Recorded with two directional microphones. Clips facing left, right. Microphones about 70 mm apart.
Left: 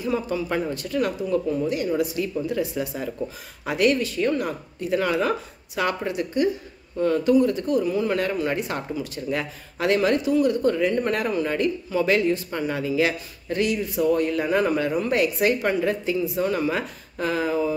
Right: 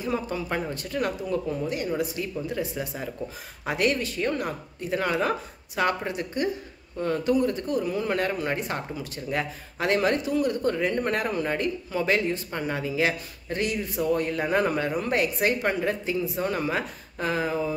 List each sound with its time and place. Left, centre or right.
0.0 s speech: right